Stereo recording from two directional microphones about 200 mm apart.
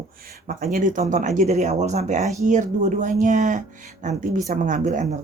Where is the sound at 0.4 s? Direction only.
45° right (ahead or behind).